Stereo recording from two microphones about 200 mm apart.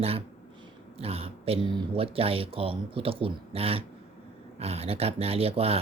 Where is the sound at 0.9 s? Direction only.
30° right (ahead or behind).